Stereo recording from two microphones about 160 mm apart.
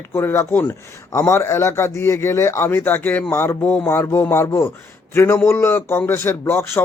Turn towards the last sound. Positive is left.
turn(degrees=15)  # may be behind; listen again after turning